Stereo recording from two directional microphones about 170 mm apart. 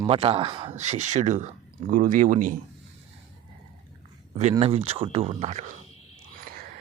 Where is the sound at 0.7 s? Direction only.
45° right (ahead or behind).